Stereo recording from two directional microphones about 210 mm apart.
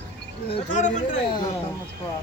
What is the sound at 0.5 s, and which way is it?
Speech, 35° left (ahead or behind).